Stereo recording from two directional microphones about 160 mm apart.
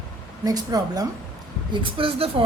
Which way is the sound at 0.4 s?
25° right (ahead or behind).